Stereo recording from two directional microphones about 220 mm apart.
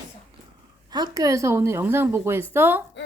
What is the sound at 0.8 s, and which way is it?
A woman's voice, 15° right (ahead or behind).